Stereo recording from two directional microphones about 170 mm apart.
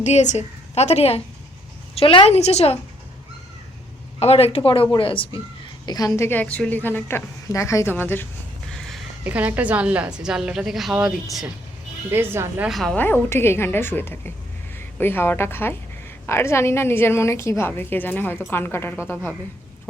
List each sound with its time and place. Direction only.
0.0 s a woman's voice: 45° left (ahead or behind)
4.2 s a woman's voice: 35° left (ahead or behind); by 8.3 s 10° left (ahead or behind)
8.9 s a woman's voice: 10° right (ahead or behind)
12.1 s speech: 15° right (ahead or behind)
12.6 s a woman's voice: centre (ahead or behind)